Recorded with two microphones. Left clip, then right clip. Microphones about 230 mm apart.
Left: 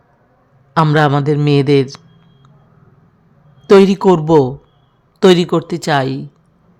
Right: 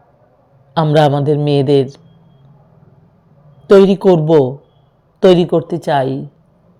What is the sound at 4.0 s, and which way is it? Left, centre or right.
Speech, centre.